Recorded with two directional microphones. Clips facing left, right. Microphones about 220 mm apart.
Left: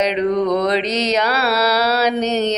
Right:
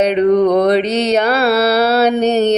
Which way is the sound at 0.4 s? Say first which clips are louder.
Right 5 dB; 65° right (ahead or behind).